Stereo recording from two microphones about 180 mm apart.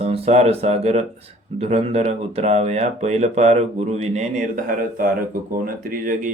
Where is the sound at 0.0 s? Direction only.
35° right (ahead or behind).